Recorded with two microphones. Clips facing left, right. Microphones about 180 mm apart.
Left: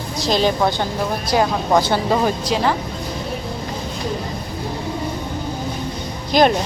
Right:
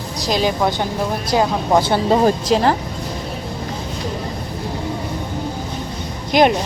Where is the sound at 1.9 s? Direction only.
25° right (ahead or behind).